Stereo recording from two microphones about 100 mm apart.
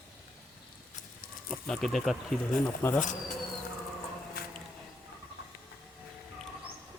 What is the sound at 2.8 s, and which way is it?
Speech, 20° left (ahead or behind).